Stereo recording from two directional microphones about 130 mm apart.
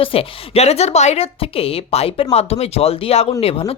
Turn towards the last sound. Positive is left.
turn(degrees=50)  # may be behind; listen again after turning